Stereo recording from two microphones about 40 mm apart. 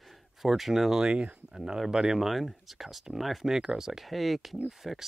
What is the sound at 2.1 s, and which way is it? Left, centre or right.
Speech, centre.